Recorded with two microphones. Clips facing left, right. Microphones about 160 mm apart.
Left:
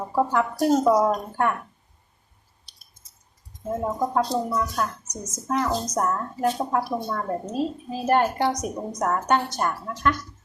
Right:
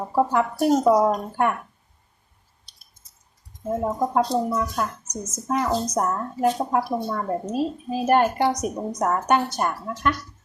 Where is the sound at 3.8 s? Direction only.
15° right (ahead or behind).